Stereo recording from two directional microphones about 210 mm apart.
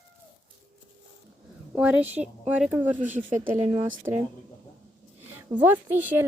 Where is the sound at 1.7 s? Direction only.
5° right (ahead or behind).